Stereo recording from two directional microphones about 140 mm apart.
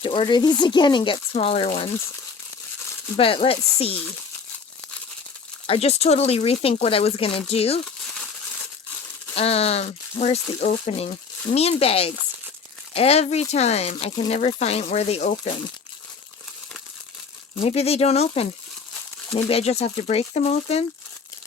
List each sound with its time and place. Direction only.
0.0 s speech: 35° left (ahead or behind)
1.3 s speech: 45° left (ahead or behind)
3.2 s speech: 40° left (ahead or behind)
5.6 s speech: 45° left (ahead or behind)
9.3 s speech: 45° left (ahead or behind)
17.6 s speech: 45° left (ahead or behind)